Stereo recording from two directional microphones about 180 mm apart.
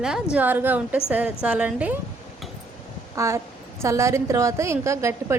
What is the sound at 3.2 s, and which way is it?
A woman's voice, 15° right (ahead or behind).